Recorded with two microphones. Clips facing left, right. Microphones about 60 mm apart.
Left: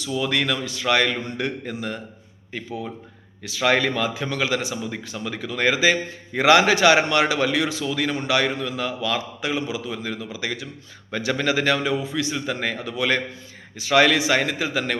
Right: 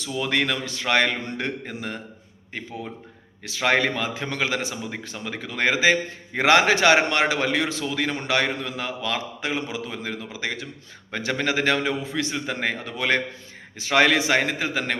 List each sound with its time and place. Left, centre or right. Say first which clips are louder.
0.1 s a man's voice: left 1 dB; right
3.8 s a man's voice: left 1 dB; right
5.0 s a man's voice: left 3 dB; right
11.8 s a man's voice: left 2 dB; right